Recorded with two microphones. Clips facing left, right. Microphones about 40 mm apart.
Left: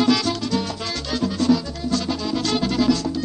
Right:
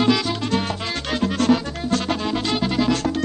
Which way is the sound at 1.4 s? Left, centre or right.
Right.